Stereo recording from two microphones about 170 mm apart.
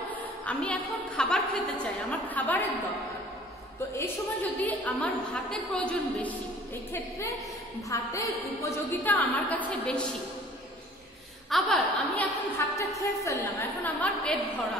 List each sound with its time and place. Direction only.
0.1 s a woman's voice: 10° left (ahead or behind)
4.0 s a woman's voice: 10° left (ahead or behind)
11.5 s a woman's voice: 5° left (ahead or behind)